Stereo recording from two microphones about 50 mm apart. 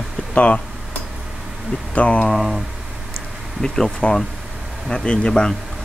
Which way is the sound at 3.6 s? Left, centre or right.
Centre.